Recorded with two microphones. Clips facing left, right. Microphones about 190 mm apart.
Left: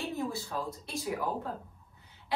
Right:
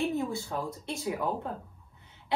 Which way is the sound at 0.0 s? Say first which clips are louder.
Right 4 dB; 15° right (ahead or behind).